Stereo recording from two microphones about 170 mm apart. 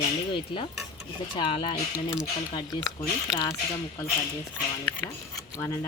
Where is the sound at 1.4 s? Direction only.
30° left (ahead or behind).